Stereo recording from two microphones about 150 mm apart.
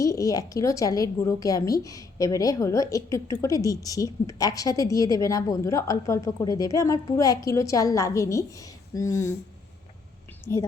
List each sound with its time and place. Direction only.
0.0 s a woman's voice: 20° left (ahead or behind)
10.4 s a woman's voice: 20° left (ahead or behind)